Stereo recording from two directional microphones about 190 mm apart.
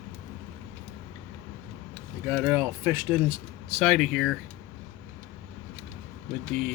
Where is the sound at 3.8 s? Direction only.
Centre (ahead or behind).